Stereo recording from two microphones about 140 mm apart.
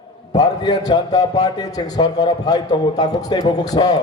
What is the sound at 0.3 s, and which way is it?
A man's voice, 25° left (ahead or behind).